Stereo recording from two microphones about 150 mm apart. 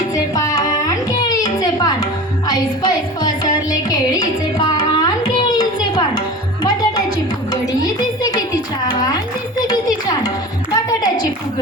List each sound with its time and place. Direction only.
0.1 s music: 25° left (ahead or behind)